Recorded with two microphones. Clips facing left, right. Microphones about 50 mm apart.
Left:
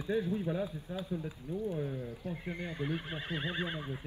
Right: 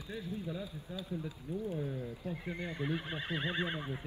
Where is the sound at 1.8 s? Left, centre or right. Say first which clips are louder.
Left 1 dB; left.